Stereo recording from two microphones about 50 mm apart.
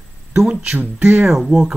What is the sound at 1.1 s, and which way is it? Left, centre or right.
Speech, centre.